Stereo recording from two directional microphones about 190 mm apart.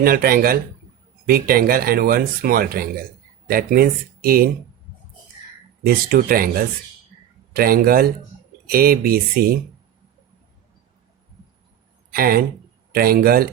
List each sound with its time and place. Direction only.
0.0 s speech: 50° right (ahead or behind)
5.9 s speech: 50° right (ahead or behind)
12.1 s speech: 50° right (ahead or behind)